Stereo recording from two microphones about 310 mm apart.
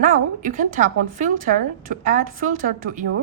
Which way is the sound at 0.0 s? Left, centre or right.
Right.